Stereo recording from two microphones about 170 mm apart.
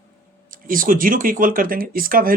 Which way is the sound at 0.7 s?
55° right (ahead or behind).